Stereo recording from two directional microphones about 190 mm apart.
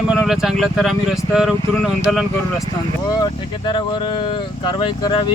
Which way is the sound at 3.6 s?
25° left (ahead or behind).